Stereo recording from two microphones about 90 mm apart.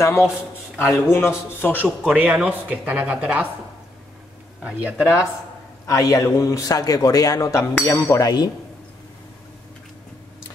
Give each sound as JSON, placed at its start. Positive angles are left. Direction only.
{"t": 0.0, "sound": "a man's voice", "side_deg": 30}
{"t": 1.6, "sound": "speech", "side_deg": 15}
{"t": 2.1, "sound": "speech", "side_deg": -15}
{"t": 4.6, "sound": "speech", "side_deg": -15}
{"t": 5.9, "sound": "a man's voice", "side_deg": 40}